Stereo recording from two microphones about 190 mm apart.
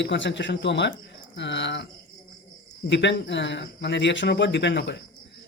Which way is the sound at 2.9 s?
65° left (ahead or behind).